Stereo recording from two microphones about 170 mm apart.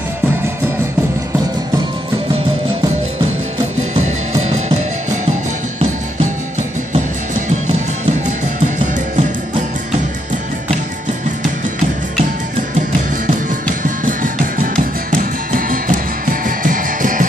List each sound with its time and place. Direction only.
3.9 s music: 45° right (ahead or behind)
6.9 s music: 45° right (ahead or behind)
13.8 s music: 50° right (ahead or behind)